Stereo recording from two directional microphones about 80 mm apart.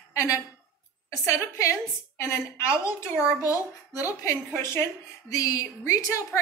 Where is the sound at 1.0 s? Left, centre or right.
Left.